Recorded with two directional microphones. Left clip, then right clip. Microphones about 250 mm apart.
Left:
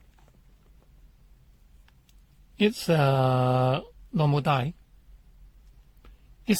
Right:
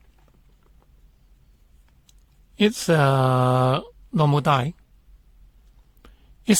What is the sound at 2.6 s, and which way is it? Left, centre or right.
Speech, right.